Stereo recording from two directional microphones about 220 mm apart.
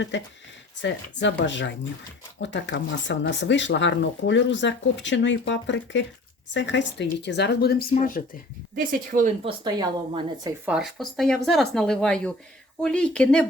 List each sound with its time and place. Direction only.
0.1 s a woman's voice: 55° left (ahead or behind); by 8.2 s 40° left (ahead or behind)
8.7 s speech: 40° right (ahead or behind)
9.4 s a woman's voice: 25° right (ahead or behind)
10.7 s speech: centre (ahead or behind)